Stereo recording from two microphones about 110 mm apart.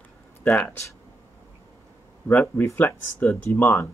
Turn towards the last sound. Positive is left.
turn(degrees=15)  # may be behind; listen again after turning